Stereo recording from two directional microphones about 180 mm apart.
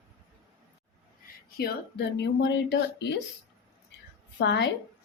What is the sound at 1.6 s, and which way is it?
Speech, 65° left (ahead or behind).